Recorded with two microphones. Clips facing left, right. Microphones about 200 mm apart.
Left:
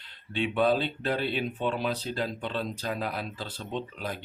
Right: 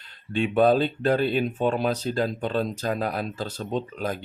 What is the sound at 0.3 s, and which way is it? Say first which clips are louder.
Speech: right 6 dB; 45° right (ahead or behind).